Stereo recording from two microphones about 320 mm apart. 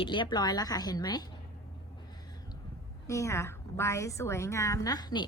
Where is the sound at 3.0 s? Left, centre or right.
Centre.